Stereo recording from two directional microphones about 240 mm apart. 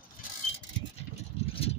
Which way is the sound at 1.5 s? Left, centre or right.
Left.